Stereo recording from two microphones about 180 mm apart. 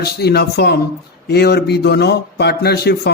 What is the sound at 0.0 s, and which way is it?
A man's voice, 65° left (ahead or behind).